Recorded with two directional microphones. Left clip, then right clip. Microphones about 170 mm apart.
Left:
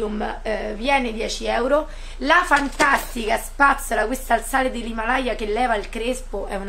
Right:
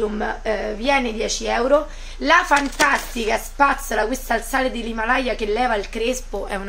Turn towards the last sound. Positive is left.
turn(degrees=-10)  # may be behind; listen again after turning